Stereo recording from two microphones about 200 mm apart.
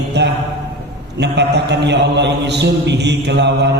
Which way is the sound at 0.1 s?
60° right (ahead or behind).